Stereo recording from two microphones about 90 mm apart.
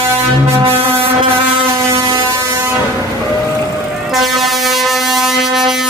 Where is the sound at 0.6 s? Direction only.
90° right.